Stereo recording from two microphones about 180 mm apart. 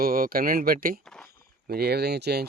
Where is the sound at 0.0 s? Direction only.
55° right (ahead or behind).